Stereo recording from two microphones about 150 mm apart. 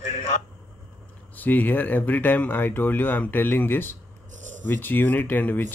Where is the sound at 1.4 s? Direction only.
10° left (ahead or behind).